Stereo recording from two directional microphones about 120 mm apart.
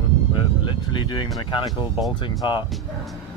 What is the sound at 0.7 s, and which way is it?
Speech, 40° left (ahead or behind).